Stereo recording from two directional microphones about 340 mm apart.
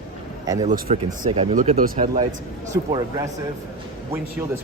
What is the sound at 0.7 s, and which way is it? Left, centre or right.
Speech, right.